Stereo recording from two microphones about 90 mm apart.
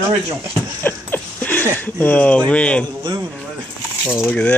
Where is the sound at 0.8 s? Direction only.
20° left (ahead or behind).